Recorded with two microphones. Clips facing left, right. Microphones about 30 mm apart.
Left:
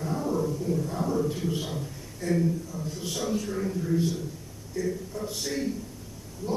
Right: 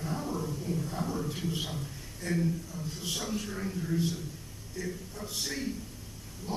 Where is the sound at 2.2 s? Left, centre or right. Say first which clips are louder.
Left 5 dB; centre.